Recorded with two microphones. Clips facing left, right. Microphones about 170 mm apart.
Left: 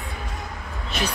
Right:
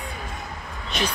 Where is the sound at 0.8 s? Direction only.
5° left (ahead or behind).